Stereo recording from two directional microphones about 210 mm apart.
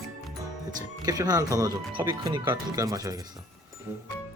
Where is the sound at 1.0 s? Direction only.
20° right (ahead or behind).